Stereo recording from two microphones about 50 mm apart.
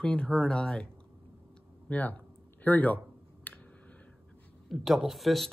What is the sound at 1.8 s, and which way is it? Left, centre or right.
Speech, left.